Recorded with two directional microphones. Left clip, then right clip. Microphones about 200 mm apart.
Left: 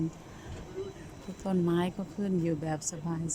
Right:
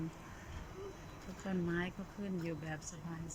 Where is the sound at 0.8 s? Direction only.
45° left (ahead or behind).